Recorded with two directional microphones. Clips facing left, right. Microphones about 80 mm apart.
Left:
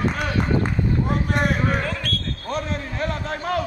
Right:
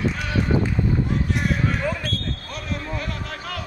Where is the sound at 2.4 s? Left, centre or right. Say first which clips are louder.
Left 4 dB; left.